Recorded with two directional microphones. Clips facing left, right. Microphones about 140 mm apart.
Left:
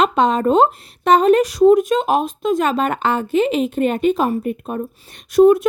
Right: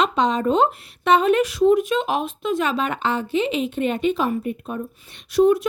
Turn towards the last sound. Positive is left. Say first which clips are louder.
# left 5 dB
turn(degrees=50)  # may be behind; listen again after turning